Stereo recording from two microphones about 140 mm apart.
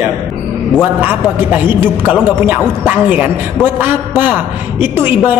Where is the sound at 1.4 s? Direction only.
15° right (ahead or behind).